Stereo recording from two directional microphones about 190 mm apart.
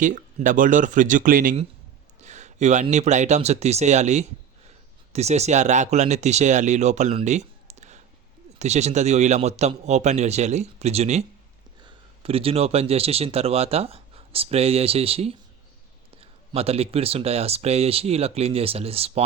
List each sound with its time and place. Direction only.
0.0 s speech: 40° right (ahead or behind)